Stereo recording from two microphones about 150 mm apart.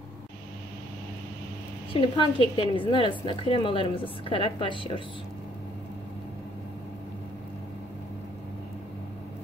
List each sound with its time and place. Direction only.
2.0 s a woman's voice: 35° left (ahead or behind)